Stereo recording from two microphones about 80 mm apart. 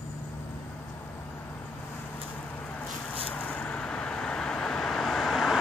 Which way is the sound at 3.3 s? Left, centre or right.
Centre.